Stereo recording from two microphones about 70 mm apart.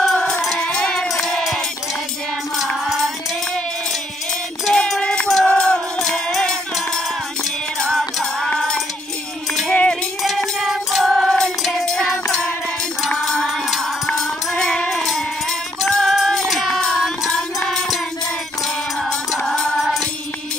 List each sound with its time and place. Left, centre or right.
0.0 s music: centre
4.7 s a sound: centre
5.0 s music: centre
8.2 s music: centre
10.2 s music: centre
15.8 s music: centre
19.0 s music: centre